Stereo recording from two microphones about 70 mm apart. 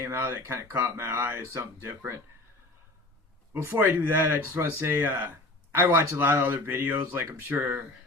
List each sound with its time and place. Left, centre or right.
0.0 s speech: right
3.6 s speech: right